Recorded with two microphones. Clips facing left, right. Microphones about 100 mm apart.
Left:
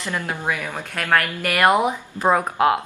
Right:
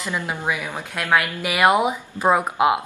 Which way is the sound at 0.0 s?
10° right (ahead or behind).